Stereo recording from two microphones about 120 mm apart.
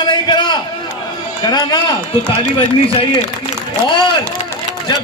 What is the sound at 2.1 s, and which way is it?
Speech, 45° left (ahead or behind).